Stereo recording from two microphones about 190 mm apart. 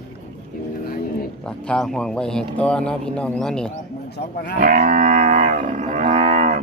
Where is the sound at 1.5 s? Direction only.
5° left (ahead or behind).